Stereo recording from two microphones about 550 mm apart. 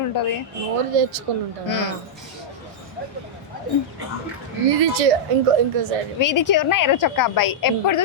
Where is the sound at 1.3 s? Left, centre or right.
Right.